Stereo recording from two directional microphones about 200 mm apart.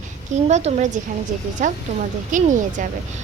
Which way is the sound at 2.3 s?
40° right (ahead or behind).